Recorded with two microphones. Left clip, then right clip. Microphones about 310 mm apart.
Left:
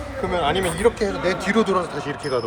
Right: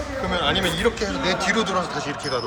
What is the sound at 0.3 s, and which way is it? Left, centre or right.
Speech, left.